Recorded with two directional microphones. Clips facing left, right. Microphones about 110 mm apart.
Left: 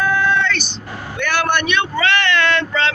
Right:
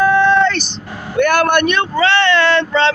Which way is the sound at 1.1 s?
50° right (ahead or behind).